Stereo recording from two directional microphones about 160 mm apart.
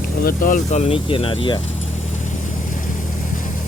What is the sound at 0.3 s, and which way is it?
Speech, 55° left (ahead or behind).